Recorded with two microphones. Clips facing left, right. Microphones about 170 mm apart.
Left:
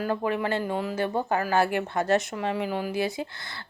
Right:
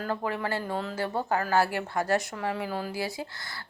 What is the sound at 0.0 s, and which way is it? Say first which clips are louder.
Speech: left 4 dB; 20° left (ahead or behind).